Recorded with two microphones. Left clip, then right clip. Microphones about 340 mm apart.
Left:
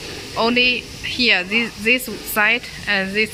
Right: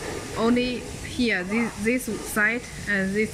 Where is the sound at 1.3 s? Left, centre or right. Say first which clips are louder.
Left 7 dB; left.